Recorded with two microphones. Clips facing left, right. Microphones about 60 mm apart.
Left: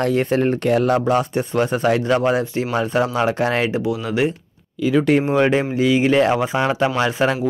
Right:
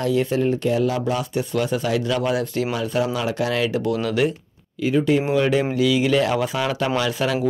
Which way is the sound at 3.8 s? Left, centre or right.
Centre.